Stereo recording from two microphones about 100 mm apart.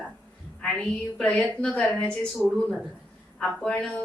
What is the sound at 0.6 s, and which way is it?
A woman's voice, 10° left (ahead or behind).